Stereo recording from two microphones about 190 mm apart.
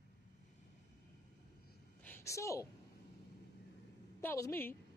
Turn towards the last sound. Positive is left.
turn(degrees=10)  # may be behind; listen again after turning